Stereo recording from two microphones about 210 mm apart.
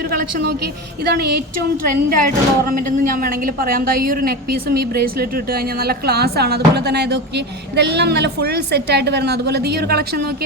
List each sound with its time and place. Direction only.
0.1 s a woman's voice: 45° right (ahead or behind)